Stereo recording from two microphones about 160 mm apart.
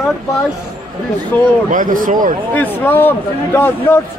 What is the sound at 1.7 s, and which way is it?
Speech, 55° right (ahead or behind).